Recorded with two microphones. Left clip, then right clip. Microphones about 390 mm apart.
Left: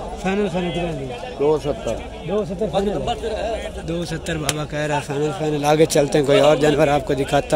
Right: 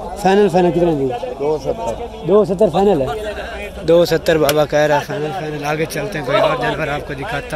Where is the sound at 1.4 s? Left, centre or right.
Left.